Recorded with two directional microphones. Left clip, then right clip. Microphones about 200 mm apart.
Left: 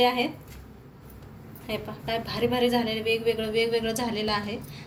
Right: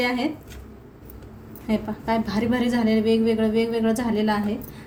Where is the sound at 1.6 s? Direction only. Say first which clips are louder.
Right 6 dB; 30° right (ahead or behind).